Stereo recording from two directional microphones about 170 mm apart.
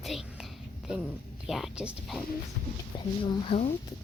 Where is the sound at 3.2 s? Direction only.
30° left (ahead or behind).